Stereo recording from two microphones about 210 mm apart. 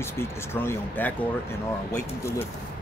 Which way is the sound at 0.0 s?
10° left (ahead or behind).